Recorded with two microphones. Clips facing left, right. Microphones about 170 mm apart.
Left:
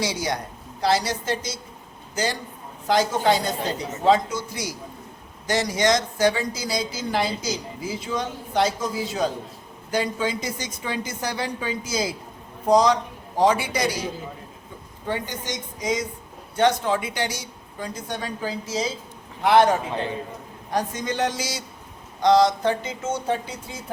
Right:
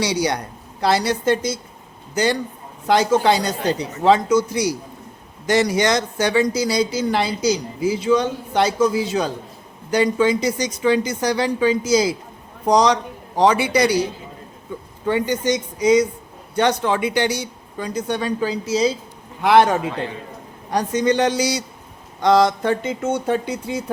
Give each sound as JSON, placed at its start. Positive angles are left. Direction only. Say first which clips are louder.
{"t": 0.0, "sound": "speech", "louder": "right 5 dB", "side_deg": -75}
{"t": 0.8, "sound": "speech", "louder": "right 3 dB", "side_deg": -60}
{"t": 2.8, "sound": "speech", "louder": "right 4 dB", "side_deg": -75}
{"t": 5.5, "sound": "speech", "louder": "right 4 dB", "side_deg": -65}
{"t": 15.1, "sound": "speech", "louder": "right 10 dB", "side_deg": -70}
{"t": 20.7, "sound": "speech", "louder": "right 7 dB", "side_deg": -80}
{"t": 22.2, "sound": "speech", "louder": "right 2 dB", "side_deg": -55}